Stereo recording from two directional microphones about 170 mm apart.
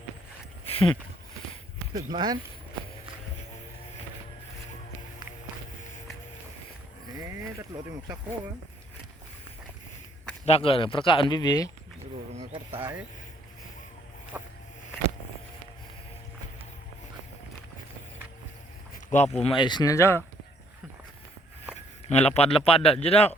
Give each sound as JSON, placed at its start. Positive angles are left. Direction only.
{"t": 0.6, "sound": "a sound", "side_deg": 35}
{"t": 1.9, "sound": "speech", "side_deg": -20}
{"t": 7.7, "sound": "speech", "side_deg": -10}
{"t": 10.4, "sound": "speech", "side_deg": 35}
{"t": 14.3, "sound": "a sound", "side_deg": -10}
{"t": 19.1, "sound": "speech", "side_deg": 40}
{"t": 22.1, "sound": "speech", "side_deg": 40}